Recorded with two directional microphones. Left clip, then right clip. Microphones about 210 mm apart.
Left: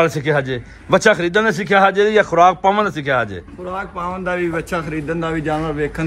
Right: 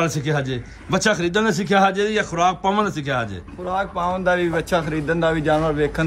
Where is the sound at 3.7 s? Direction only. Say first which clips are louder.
Right 3 dB; 45° right (ahead or behind).